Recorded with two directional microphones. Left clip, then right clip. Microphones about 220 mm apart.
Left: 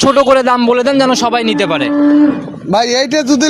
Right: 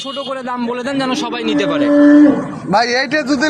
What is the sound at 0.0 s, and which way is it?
A man's voice, 45° left (ahead or behind).